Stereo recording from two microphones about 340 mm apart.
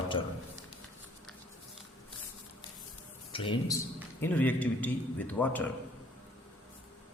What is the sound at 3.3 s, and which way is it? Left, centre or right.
A man's voice, centre.